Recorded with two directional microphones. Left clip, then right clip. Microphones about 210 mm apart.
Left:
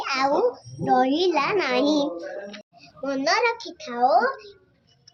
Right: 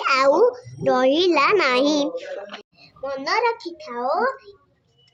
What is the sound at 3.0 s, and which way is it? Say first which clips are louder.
A child's voice: even; 10° right (ahead or behind).